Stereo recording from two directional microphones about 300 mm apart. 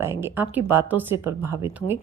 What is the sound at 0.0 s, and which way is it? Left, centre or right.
A woman's voice, centre.